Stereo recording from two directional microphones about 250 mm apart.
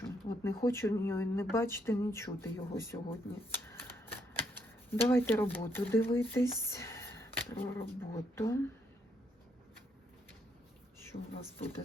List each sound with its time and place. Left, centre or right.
0.0 s speech: centre
11.1 s speech: left